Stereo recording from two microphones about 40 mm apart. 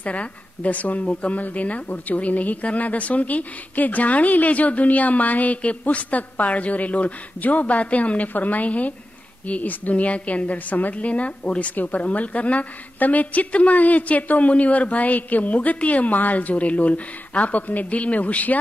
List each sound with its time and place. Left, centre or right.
0.0 s a woman's voice: left